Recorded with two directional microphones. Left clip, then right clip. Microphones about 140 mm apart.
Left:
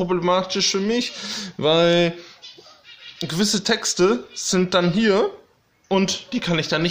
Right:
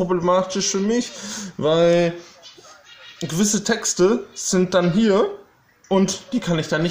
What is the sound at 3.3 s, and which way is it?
Speech, 10° right (ahead or behind).